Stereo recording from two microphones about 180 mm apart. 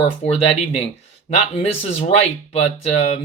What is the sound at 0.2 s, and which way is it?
Speech, 35° left (ahead or behind).